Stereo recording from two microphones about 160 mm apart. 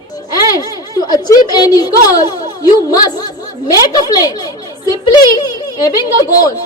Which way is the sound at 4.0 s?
25° left (ahead or behind).